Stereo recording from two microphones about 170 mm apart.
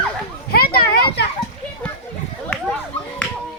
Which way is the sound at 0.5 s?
65° left (ahead or behind).